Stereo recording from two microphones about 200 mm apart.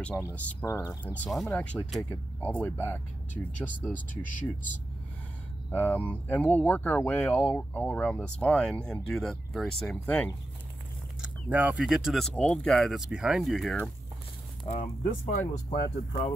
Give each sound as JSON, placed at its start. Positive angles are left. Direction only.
{"t": 0.1, "sound": "speech", "side_deg": 5}
{"t": 1.1, "sound": "speech", "side_deg": 5}
{"t": 3.9, "sound": "speech", "side_deg": 40}
{"t": 5.7, "sound": "speech", "side_deg": 10}
{"t": 11.1, "sound": "speech", "side_deg": -10}
{"t": 14.6, "sound": "speech", "side_deg": 30}